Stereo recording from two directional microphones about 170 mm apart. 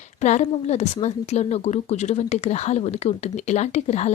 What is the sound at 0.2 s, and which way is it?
Speech, 40° left (ahead or behind).